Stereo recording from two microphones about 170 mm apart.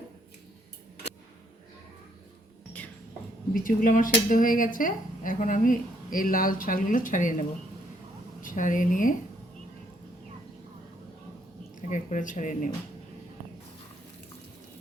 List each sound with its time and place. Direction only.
3.5 s speech: 55° left (ahead or behind)
11.9 s speech: 45° left (ahead or behind)